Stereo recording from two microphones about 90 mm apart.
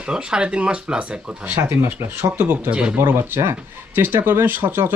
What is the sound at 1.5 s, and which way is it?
Speech, 25° right (ahead or behind).